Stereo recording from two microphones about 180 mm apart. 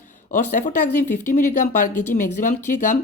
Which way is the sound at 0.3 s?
45° left (ahead or behind).